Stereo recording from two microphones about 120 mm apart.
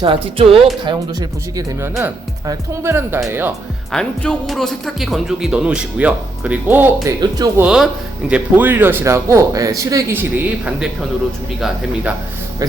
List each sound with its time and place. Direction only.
0.0 s speech: 50° right (ahead or behind)
0.9 s speech: 35° right (ahead or behind)
1.8 s speech: 15° right (ahead or behind)
3.9 s speech: 5° left (ahead or behind); by 7.1 s 15° right (ahead or behind)
7.2 s speech: 35° right (ahead or behind)
7.6 s speech: 5° right (ahead or behind)